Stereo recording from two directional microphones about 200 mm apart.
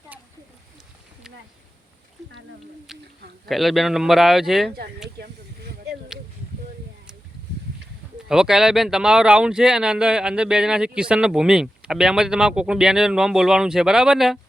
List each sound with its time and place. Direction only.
3.2 s a sound: 50° right (ahead or behind)
3.5 s speech: centre (ahead or behind)
5.1 s snake: 50° right (ahead or behind)
8.3 s speech: 5° right (ahead or behind)